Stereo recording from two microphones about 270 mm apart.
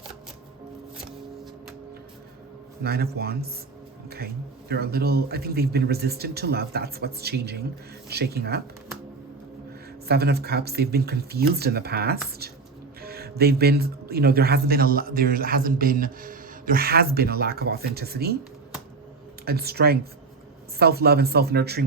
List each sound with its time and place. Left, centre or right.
2.8 s speech: right
4.7 s speech: right
10.1 s speech: right
19.5 s speech: right